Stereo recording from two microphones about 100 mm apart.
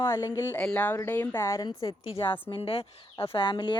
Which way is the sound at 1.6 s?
40° left (ahead or behind).